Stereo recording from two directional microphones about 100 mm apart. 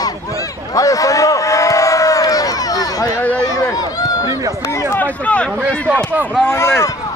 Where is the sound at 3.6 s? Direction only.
40° left (ahead or behind).